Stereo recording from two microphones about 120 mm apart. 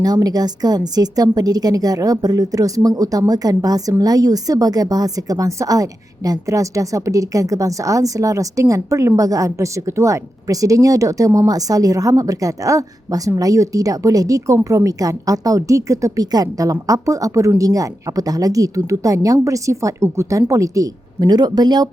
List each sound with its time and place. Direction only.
0.0 s a woman's voice: 35° right (ahead or behind)